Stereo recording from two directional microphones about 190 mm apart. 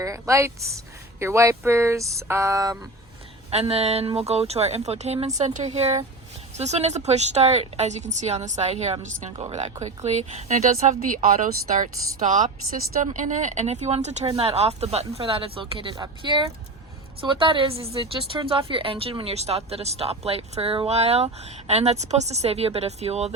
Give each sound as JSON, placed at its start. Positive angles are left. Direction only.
{"t": 0.0, "sound": "speech", "side_deg": -15}
{"t": 3.5, "sound": "a woman's voice", "side_deg": -30}